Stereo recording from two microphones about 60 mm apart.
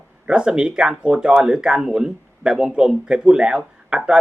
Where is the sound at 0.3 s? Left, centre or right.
Centre.